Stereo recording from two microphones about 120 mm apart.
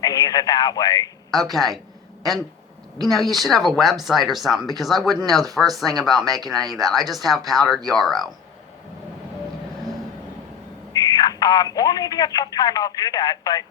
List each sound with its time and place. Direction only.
0.0 s speech: 30° left (ahead or behind)
1.3 s speech: centre (ahead or behind)
3.1 s speech: centre (ahead or behind)
5.9 s speech: 35° right (ahead or behind)
6.7 s speech: centre (ahead or behind)
10.9 s speech: 30° left (ahead or behind)